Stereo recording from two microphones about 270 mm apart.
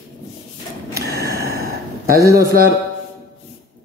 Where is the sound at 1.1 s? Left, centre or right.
Right.